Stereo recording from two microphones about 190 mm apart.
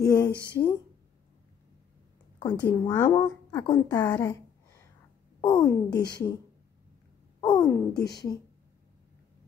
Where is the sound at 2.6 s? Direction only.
15° left (ahead or behind).